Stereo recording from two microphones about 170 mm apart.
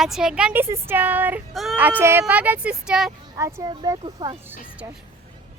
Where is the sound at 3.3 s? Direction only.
20° right (ahead or behind).